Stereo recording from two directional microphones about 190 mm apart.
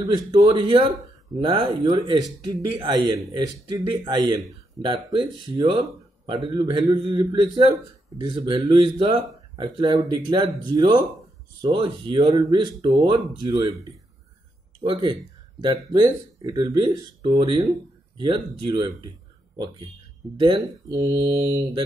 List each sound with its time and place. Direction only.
0.0 s speech: 20° right (ahead or behind)
20.3 s speech: 25° right (ahead or behind)